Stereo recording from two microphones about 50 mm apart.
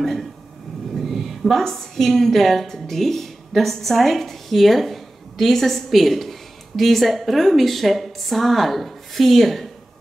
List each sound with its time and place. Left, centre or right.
0.0 s a woman's voice: centre